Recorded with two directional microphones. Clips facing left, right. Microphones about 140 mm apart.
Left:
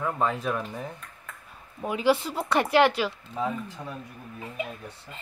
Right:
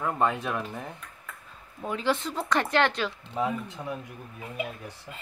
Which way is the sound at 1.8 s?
10° left (ahead or behind).